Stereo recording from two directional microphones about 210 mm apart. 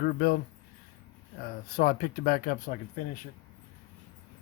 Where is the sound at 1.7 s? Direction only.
45° left (ahead or behind).